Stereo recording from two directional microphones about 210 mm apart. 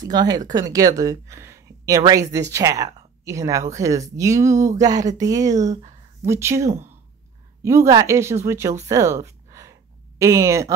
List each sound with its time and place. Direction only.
0.0 s speech: 20° right (ahead or behind)